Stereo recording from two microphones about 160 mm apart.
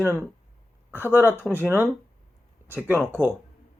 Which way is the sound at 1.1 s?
15° left (ahead or behind).